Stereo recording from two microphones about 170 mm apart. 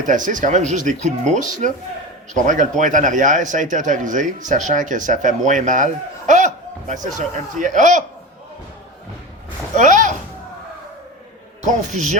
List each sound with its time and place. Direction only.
0.0 s speech: 50° right (ahead or behind)
9.7 s speech: 45° right (ahead or behind)
11.9 s speech: 45° right (ahead or behind)